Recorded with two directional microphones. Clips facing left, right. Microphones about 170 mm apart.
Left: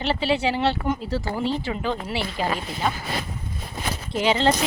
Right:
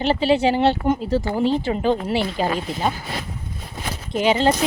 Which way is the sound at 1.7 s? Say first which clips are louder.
Right 7 dB; 30° right (ahead or behind).